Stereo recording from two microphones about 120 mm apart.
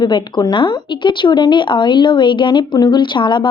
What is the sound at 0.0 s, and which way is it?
Speech, 35° left (ahead or behind).